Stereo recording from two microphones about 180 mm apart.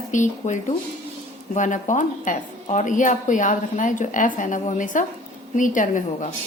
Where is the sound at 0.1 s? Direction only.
45° left (ahead or behind).